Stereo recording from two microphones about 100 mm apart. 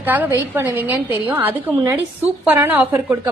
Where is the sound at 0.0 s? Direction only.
15° right (ahead or behind).